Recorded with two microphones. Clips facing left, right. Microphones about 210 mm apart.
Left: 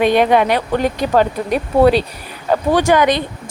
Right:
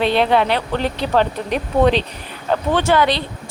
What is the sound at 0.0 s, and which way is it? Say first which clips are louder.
A woman's voice: left 3 dB; 15° left (ahead or behind).